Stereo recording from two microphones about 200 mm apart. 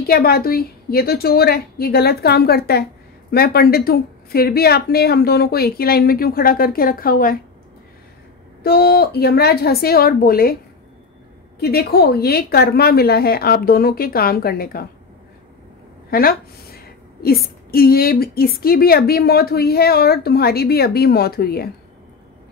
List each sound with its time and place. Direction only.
0.0 s a woman's voice: 50° left (ahead or behind)
8.6 s a woman's voice: 50° left (ahead or behind)
11.6 s a woman's voice: 50° left (ahead or behind)
16.1 s a sound: 50° left (ahead or behind)
17.6 s a woman's voice: 50° left (ahead or behind)